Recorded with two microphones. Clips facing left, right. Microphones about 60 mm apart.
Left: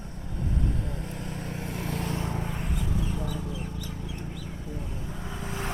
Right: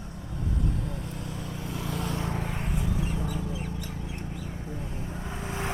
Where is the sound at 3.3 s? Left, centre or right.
Right.